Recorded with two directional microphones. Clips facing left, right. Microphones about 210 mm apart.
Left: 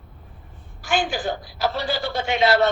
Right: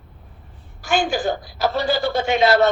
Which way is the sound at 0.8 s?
45° right (ahead or behind).